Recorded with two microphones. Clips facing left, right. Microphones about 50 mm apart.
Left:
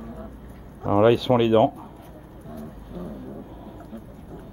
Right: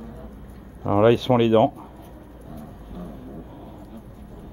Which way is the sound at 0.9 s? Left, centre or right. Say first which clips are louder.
Even; centre.